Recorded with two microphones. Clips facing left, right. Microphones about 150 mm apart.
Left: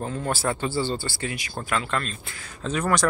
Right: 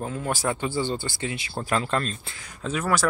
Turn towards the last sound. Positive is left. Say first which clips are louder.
# left 1 dB
turn(degrees=-5)  # may be behind; listen again after turning